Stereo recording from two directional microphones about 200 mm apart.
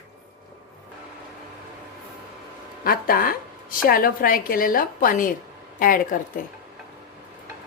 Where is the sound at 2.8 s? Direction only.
45° left (ahead or behind).